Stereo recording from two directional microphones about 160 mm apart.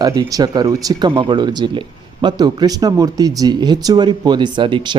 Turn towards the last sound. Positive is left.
turn(degrees=-30)  # may be behind; listen again after turning